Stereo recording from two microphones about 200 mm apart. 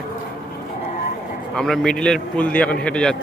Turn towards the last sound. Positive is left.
turn(degrees=5)  # may be behind; listen again after turning